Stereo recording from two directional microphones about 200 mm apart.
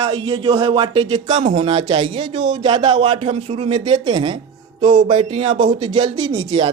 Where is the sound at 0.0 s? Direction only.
25° right (ahead or behind).